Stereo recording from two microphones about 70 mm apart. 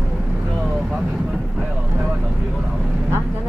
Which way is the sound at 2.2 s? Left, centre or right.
Centre.